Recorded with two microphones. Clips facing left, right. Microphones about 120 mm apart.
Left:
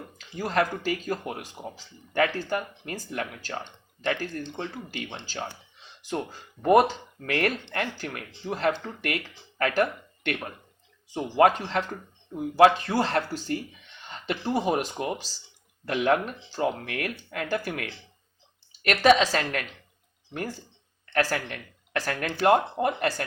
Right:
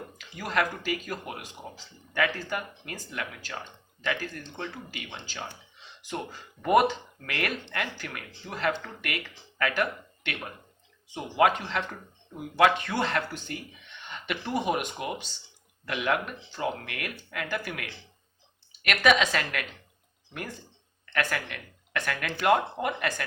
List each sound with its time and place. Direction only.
0.3 s speech: 35° left (ahead or behind)
6.6 s speech: 35° left (ahead or behind)